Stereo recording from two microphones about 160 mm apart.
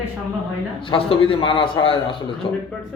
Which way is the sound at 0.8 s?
35° left (ahead or behind).